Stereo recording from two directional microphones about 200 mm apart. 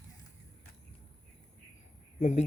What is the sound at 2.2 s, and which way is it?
Speech, 35° left (ahead or behind).